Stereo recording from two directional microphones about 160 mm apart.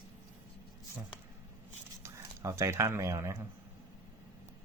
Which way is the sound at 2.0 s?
20° right (ahead or behind).